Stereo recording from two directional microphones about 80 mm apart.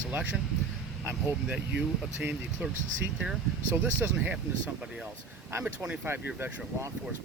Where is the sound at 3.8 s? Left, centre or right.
Centre.